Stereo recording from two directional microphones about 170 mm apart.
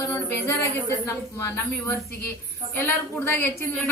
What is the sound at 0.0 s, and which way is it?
A woman's voice, 15° left (ahead or behind).